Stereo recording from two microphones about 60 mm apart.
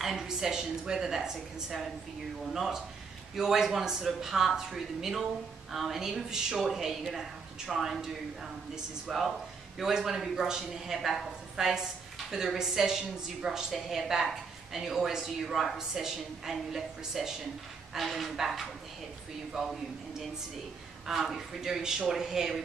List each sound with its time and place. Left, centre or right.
0.0 s a woman's voice: centre
21.1 s a woman's voice: centre